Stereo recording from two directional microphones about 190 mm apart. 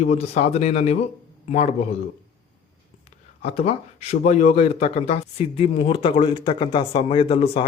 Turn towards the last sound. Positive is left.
turn(degrees=30)  # may be behind; listen again after turning